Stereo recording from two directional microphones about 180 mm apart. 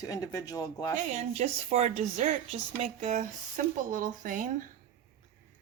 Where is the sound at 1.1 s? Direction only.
40° right (ahead or behind).